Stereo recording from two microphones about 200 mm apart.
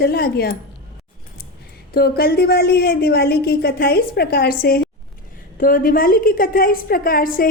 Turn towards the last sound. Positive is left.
turn(degrees=45)  # may be behind; listen again after turning